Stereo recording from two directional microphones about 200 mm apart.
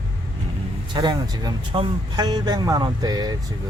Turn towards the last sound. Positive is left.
turn(degrees=-20)  # may be behind; listen again after turning